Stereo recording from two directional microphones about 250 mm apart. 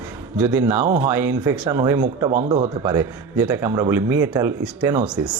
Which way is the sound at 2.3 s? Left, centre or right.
Right.